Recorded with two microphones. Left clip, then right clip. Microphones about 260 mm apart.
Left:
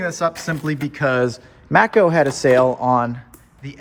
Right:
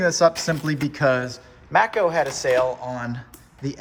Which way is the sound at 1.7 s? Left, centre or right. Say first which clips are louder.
Left 5 dB; left.